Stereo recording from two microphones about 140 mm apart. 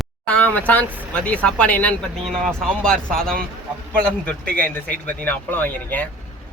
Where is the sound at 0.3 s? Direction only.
10° left (ahead or behind).